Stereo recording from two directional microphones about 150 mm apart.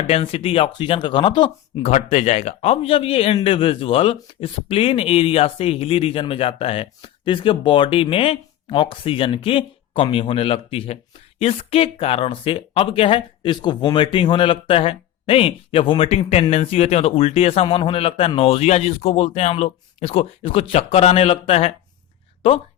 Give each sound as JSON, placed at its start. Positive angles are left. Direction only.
{"t": 0.1, "sound": "speech", "side_deg": 40}
{"t": 1.8, "sound": "speech", "side_deg": 45}